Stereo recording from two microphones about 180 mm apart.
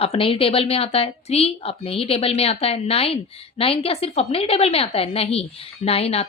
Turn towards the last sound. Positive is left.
turn(degrees=35)  # may be behind; listen again after turning